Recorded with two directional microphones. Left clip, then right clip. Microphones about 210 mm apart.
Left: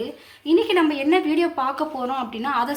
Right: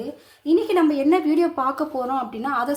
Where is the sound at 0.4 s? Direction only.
40° right (ahead or behind).